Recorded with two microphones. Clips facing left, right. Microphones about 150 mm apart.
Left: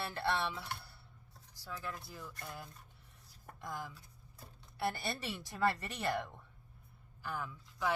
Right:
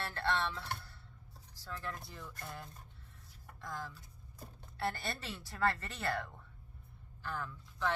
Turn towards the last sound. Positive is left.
turn(degrees=10)  # may be behind; listen again after turning